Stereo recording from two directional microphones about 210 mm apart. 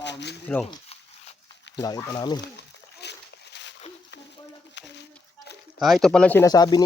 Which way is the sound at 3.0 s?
55° left (ahead or behind).